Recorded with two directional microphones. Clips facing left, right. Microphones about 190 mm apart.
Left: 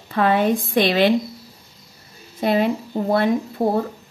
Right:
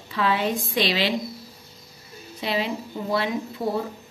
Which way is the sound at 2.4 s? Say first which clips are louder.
Left 8 dB; 50° left (ahead or behind).